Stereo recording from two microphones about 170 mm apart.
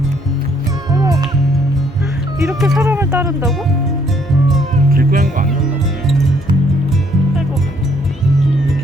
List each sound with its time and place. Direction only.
0.9 s music: 25° right (ahead or behind)
2.6 s speech: centre (ahead or behind)
2.8 s speech: 15° right (ahead or behind)
4.9 s music: 55° right (ahead or behind)